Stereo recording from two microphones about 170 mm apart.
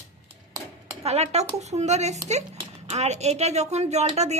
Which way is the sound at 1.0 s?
40° right (ahead or behind).